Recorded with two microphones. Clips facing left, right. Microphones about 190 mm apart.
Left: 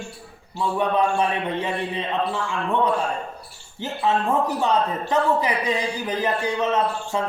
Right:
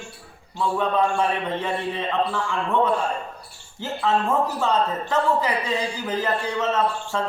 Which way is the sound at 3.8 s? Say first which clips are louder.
Even; 20° left (ahead or behind).